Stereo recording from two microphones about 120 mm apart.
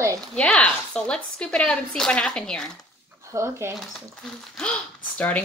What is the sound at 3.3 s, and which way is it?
Speech, 20° right (ahead or behind).